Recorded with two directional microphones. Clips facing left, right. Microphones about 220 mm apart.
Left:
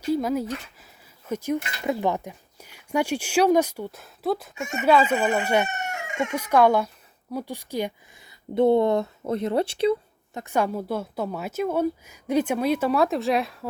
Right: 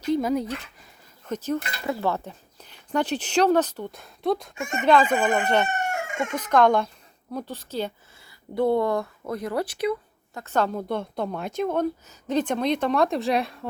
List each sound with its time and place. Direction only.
0.1 s a woman's voice: centre (ahead or behind)
4.5 s speech: 50° right (ahead or behind)
4.8 s speech: 5° left (ahead or behind)
5.6 s chicken: 55° right (ahead or behind)
6.3 s speech: 10° left (ahead or behind); by 9.9 s 25° left (ahead or behind)
10.3 s a woman's voice: 10° left (ahead or behind)